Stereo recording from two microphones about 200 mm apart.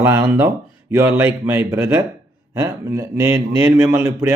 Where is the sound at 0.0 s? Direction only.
15° right (ahead or behind).